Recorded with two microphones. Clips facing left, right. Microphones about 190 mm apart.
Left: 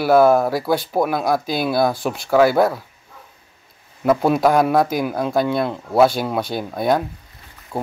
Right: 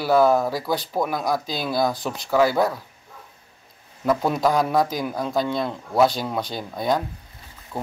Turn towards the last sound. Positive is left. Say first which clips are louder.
# left 5 dB
turn(degrees=30)  # may be behind; listen again after turning